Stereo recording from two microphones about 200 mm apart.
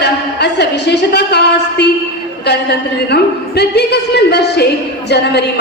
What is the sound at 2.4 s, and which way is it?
A woman's voice, 55° left (ahead or behind).